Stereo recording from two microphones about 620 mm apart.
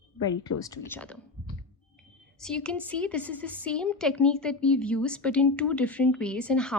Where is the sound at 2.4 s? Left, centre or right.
Centre.